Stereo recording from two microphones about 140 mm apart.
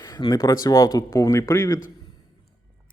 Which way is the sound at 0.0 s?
25° left (ahead or behind).